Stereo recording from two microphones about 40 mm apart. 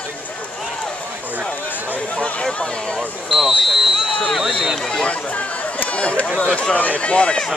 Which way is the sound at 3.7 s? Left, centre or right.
Centre.